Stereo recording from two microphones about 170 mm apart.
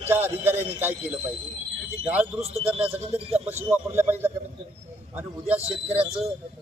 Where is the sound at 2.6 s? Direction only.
10° right (ahead or behind).